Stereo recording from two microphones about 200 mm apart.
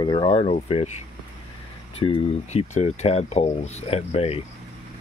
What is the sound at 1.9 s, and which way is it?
Speech, 30° left (ahead or behind).